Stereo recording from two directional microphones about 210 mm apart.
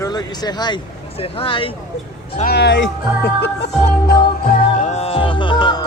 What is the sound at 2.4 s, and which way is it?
Speech, 50° left (ahead or behind).